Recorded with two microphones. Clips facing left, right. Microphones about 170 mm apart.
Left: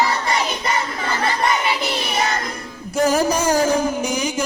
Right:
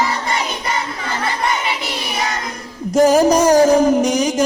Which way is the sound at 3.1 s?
35° right (ahead or behind).